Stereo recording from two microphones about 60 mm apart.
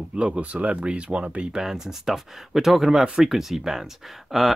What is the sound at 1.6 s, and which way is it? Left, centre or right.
Speech, centre.